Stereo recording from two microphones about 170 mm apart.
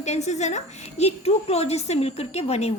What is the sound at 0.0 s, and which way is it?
A woman's voice, 40° left (ahead or behind).